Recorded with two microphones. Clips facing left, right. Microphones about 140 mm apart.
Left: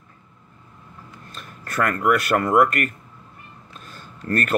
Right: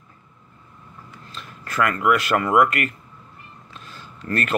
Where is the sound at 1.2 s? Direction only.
50° left (ahead or behind).